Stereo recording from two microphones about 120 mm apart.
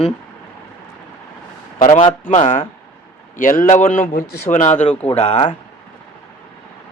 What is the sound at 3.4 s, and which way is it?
Speech, 90° left.